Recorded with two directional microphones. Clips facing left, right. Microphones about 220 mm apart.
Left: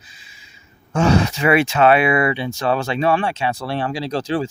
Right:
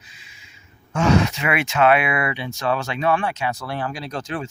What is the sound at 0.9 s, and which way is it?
Speech, 35° left (ahead or behind).